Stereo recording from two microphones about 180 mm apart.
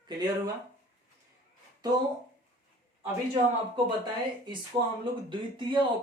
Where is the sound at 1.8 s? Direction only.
20° right (ahead or behind).